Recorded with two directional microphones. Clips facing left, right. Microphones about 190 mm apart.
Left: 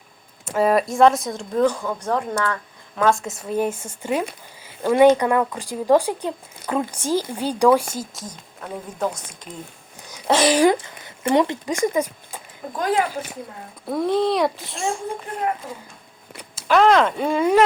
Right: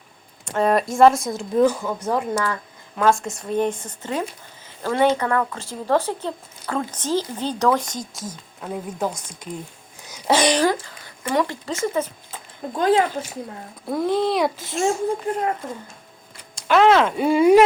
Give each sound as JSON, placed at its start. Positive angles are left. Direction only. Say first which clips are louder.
{"t": 0.4, "sound": "a woman's voice", "louder": "left 1 dB", "side_deg": 5}
{"t": 10.6, "sound": "speech", "louder": "left 4 dB", "side_deg": 20}
{"t": 12.7, "sound": "speech", "louder": "right 5 dB", "side_deg": -25}
{"t": 13.8, "sound": "a woman's voice", "louder": "left 1 dB", "side_deg": 0}
{"t": 16.6, "sound": "a woman's voice", "louder": "even", "side_deg": 0}